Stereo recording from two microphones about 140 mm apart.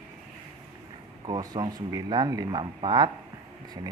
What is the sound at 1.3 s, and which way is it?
A man's voice, 35° right (ahead or behind).